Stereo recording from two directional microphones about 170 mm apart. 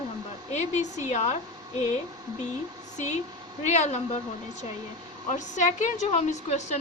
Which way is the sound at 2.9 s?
45° left (ahead or behind).